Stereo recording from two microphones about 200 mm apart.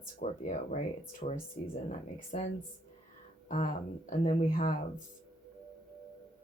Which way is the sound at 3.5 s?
40° left (ahead or behind).